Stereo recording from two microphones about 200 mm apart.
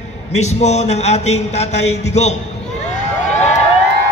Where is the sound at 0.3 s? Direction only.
35° left (ahead or behind).